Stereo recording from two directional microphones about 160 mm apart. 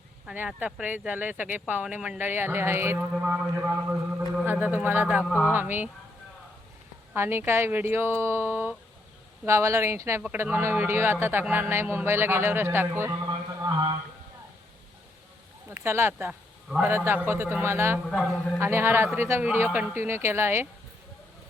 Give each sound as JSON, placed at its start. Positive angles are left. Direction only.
{"t": 0.3, "sound": "speech", "side_deg": -5}
{"t": 5.2, "sound": "speech", "side_deg": 10}
{"t": 5.5, "sound": "speech", "side_deg": -10}
{"t": 7.1, "sound": "speech", "side_deg": -15}
{"t": 13.2, "sound": "a sound", "side_deg": -20}
{"t": 15.7, "sound": "speech", "side_deg": -15}
{"t": 18.1, "sound": "a man's voice", "side_deg": 5}
{"t": 18.6, "sound": "speech", "side_deg": -15}